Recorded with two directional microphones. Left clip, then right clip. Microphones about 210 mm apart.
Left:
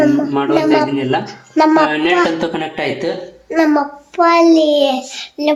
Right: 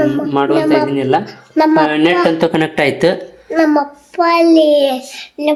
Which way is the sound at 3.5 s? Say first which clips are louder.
Right 1 dB; centre (ahead or behind).